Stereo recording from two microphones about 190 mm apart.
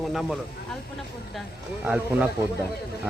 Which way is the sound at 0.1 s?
Centre (ahead or behind).